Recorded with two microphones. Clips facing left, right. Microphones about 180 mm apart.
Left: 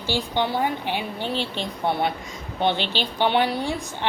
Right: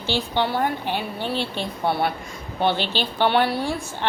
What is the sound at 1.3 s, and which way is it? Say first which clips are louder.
Speech: right 1 dB; 15° right (ahead or behind).